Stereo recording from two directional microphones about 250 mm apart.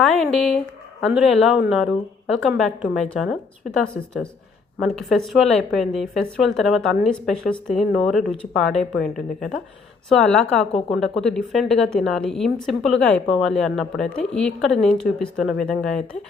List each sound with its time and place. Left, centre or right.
0.0 s speech: centre
10.7 s speech: left
10.9 s speech: centre